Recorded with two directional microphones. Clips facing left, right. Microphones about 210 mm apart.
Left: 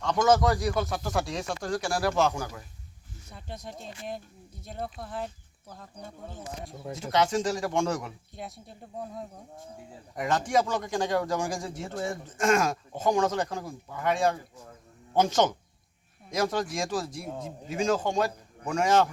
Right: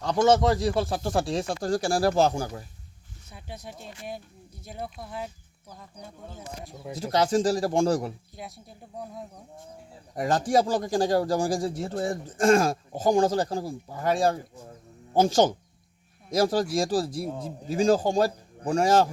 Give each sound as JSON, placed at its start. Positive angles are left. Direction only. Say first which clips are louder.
{"t": 0.0, "sound": "speech", "louder": "right 2 dB", "side_deg": -30}
{"t": 3.3, "sound": "speech", "louder": "even", "side_deg": -5}
{"t": 6.9, "sound": "speech", "louder": "right 3 dB", "side_deg": -35}
{"t": 8.4, "sound": "speech", "louder": "left 1 dB", "side_deg": 0}
{"t": 10.2, "sound": "speech", "louder": "right 3 dB", "side_deg": -35}